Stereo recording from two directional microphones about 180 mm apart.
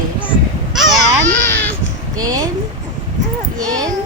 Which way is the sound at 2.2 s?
20° right (ahead or behind).